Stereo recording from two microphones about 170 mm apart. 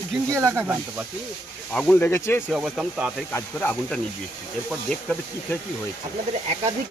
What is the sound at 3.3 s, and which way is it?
Speech, 10° left (ahead or behind).